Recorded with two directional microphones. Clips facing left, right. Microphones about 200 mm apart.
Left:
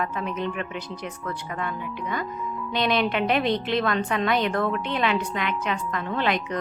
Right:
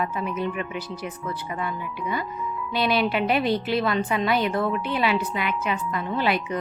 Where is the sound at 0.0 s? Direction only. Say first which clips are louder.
Right 1 dB; 5° right (ahead or behind).